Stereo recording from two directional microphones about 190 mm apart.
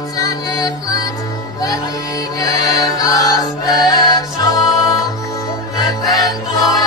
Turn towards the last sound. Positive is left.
turn(degrees=20)  # may be behind; listen again after turning